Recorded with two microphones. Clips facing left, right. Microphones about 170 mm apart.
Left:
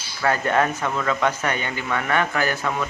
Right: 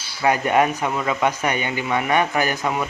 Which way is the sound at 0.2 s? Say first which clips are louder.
Right 3 dB; 15° right (ahead or behind).